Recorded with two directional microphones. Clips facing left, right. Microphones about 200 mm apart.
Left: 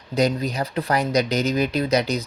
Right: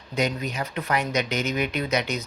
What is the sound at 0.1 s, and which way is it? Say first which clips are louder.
Speech: left 5 dB; 35° left (ahead or behind).